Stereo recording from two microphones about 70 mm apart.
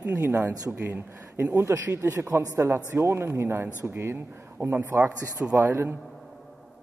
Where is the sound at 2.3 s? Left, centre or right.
Right.